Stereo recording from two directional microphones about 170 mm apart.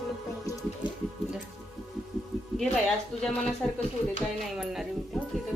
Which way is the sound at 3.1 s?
5° left (ahead or behind).